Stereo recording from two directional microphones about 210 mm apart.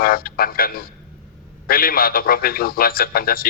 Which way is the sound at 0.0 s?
45° left (ahead or behind).